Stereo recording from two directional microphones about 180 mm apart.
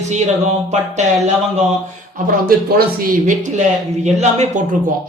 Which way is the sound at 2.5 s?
55° right (ahead or behind).